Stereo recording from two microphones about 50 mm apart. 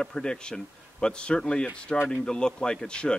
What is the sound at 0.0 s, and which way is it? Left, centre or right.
A man's voice, centre.